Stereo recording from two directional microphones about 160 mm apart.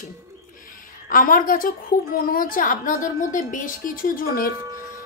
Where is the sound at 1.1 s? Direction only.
55° left (ahead or behind).